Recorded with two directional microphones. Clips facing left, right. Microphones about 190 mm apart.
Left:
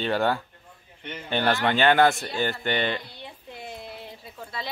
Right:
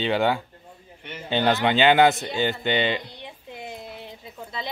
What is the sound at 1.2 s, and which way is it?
A woman's voice, 20° right (ahead or behind).